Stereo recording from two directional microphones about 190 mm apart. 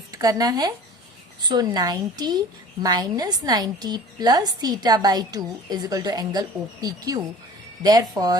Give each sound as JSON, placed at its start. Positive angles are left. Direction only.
{"t": 0.1, "sound": "a woman's voice", "side_deg": -20}